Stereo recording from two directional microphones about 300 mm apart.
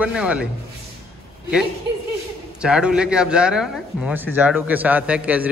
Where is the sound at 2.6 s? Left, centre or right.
Centre.